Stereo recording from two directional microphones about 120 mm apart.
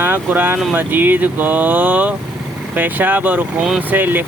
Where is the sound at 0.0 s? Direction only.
15° right (ahead or behind).